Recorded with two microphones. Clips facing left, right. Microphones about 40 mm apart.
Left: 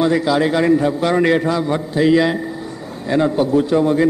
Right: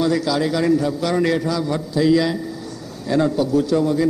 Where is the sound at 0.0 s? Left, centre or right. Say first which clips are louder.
Left 4 dB; left.